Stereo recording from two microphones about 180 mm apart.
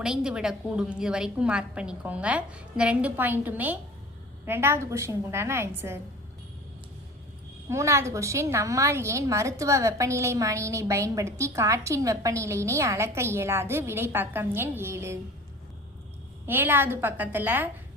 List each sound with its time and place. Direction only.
0.0 s a woman's voice: 5° right (ahead or behind)
7.7 s a woman's voice: 15° right (ahead or behind)
16.5 s a woman's voice: 10° right (ahead or behind)